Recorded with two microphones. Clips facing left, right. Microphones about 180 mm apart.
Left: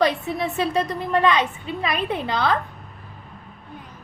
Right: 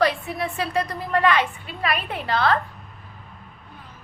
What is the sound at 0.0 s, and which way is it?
A woman's voice, 20° left (ahead or behind).